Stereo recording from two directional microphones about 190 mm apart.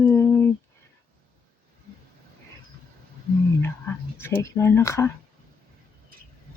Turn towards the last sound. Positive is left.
turn(degrees=15)  # may be behind; listen again after turning